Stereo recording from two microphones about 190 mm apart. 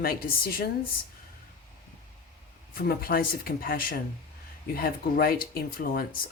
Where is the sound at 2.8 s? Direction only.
50° left (ahead or behind).